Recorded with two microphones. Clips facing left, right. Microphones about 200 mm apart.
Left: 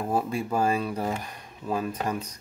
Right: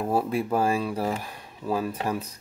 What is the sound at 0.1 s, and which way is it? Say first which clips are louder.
Speech: right 2 dB; 5° right (ahead or behind).